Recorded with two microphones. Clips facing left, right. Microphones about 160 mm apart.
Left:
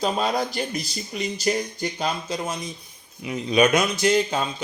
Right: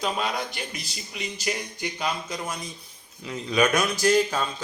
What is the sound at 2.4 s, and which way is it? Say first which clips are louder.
A man's voice: left 4 dB; 20° left (ahead or behind).